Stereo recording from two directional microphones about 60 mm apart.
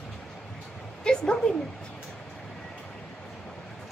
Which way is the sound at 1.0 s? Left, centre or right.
Centre.